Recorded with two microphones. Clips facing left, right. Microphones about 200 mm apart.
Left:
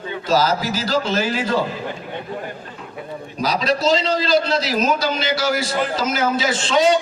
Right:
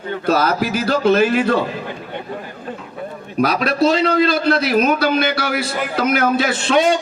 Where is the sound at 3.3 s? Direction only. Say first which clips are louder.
Right 4 dB; 60° right (ahead or behind).